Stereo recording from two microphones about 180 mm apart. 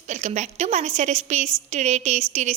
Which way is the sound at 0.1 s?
40° right (ahead or behind).